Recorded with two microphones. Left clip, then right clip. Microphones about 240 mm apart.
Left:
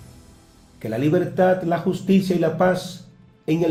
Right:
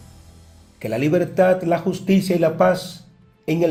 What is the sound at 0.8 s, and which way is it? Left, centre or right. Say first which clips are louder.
Speech: right 1 dB; right.